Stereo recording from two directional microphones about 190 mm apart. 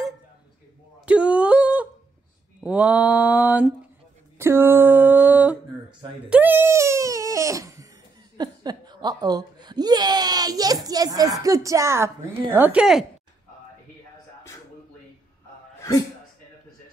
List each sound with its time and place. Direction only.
1.0 s yodeling: 5° right (ahead or behind)
2.6 s mantra: 5° right (ahead or behind)
4.4 s a sound: 10° right (ahead or behind)
8.4 s a woman's voice: 20° right (ahead or behind); by 13.0 s 5° right (ahead or behind)